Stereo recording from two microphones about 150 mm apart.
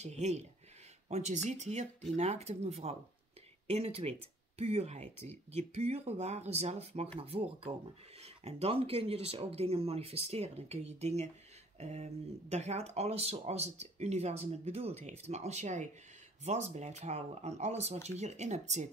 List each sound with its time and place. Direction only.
0.0 s speech: 50° right (ahead or behind)